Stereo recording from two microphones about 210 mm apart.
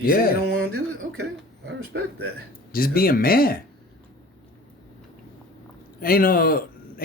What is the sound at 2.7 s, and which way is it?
Speech, 45° left (ahead or behind).